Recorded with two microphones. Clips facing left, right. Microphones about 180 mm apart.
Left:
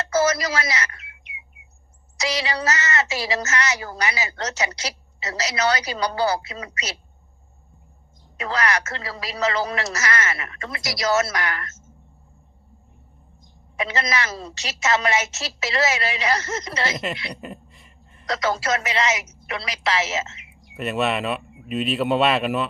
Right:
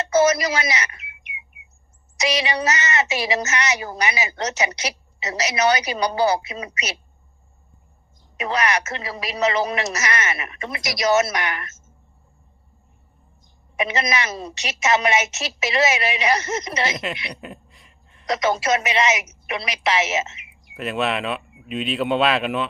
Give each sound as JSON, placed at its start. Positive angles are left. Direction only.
{"t": 0.0, "sound": "a sound", "side_deg": -20}
{"t": 2.1, "sound": "a woman's voice", "side_deg": -20}
{"t": 8.4, "sound": "a woman's voice", "side_deg": -20}
{"t": 13.7, "sound": "a woman's voice", "side_deg": -20}
{"t": 16.9, "sound": "speech", "side_deg": 0}
{"t": 17.3, "sound": "a sound", "side_deg": 0}
{"t": 18.3, "sound": "a woman's voice", "side_deg": -20}
{"t": 20.7, "sound": "speech", "side_deg": 0}